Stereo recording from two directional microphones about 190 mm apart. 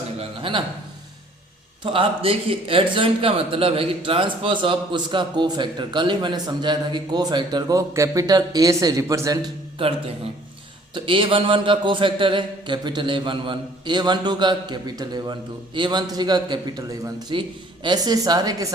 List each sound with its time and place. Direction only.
0.2 s a sound: 25° right (ahead or behind)
1.8 s a man's voice: 30° right (ahead or behind)
10.9 s a man's voice: 25° right (ahead or behind)